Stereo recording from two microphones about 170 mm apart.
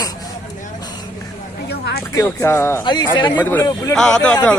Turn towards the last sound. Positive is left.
turn(degrees=10)  # may be behind; listen again after turning